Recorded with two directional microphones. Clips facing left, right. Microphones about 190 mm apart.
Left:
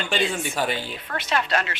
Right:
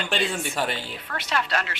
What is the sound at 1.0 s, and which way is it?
Speech, 20° left (ahead or behind).